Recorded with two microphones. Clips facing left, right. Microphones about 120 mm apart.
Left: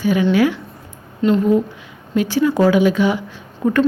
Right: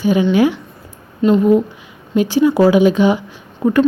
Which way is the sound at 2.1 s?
15° right (ahead or behind).